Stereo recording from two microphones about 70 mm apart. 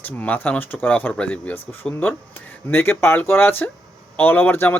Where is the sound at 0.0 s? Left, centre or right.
Left.